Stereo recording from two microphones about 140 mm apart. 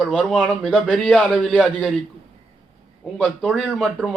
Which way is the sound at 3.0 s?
5° left (ahead or behind).